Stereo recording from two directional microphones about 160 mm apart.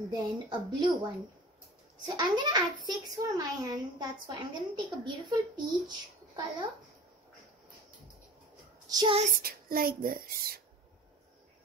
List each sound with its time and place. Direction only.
0.1 s a child's voice: 25° right (ahead or behind)
8.8 s child singing: 25° right (ahead or behind)
9.1 s child singing: 45° right (ahead or behind)
9.4 s speech: 65° right (ahead or behind)